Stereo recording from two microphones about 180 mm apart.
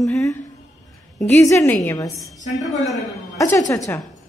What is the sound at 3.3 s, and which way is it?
Speech, 15° left (ahead or behind).